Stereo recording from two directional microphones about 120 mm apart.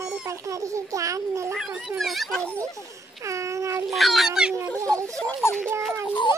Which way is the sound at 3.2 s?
25° right (ahead or behind).